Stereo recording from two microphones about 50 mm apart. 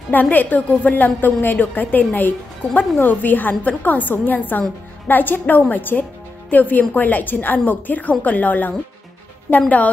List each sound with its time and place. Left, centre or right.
0.1 s a woman's voice: left